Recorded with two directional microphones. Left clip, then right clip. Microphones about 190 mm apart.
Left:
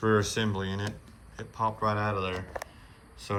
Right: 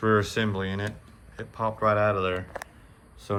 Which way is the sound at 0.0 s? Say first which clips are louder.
Right 3 dB; 20° left (ahead or behind).